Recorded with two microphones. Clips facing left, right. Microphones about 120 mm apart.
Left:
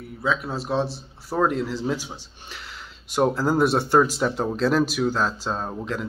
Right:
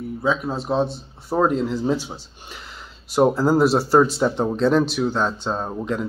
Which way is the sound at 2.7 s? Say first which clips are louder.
Right 1 dB; 40° right (ahead or behind).